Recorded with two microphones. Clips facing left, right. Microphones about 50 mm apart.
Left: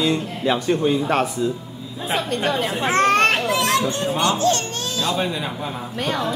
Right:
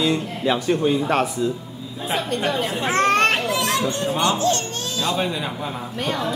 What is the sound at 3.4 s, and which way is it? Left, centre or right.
Children playing, left.